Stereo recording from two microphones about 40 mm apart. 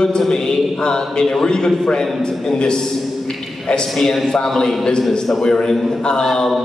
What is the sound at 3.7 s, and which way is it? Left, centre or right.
Mantra, left.